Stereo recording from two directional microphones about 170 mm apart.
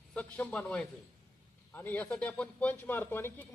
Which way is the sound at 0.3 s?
10° left (ahead or behind).